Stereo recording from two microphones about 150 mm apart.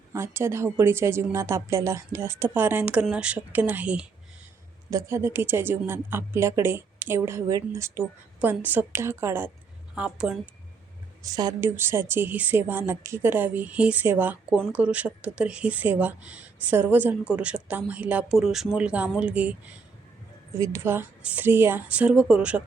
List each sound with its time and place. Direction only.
0.1 s speech: 15° right (ahead or behind)
4.9 s speech: 20° right (ahead or behind)
11.2 s a woman's voice: 25° right (ahead or behind); by 19.7 s 10° right (ahead or behind)
20.5 s speech: 20° right (ahead or behind)